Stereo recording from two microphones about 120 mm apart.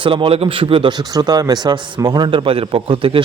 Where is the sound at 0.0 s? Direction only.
45° right (ahead or behind).